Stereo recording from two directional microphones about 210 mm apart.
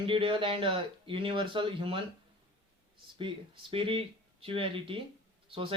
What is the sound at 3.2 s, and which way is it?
Speech, 25° right (ahead or behind).